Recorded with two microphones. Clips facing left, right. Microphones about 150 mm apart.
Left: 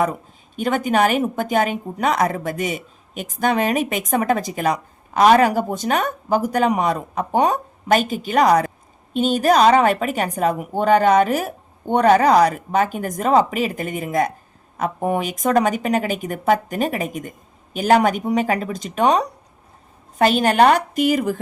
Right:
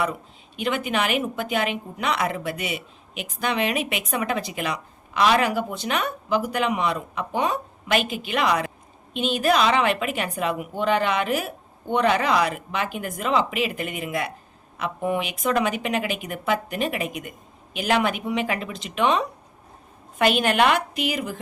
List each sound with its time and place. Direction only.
0.0 s a woman's voice: 45° left (ahead or behind)